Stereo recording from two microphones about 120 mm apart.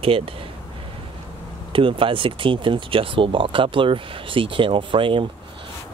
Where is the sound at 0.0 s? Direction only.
50° right (ahead or behind).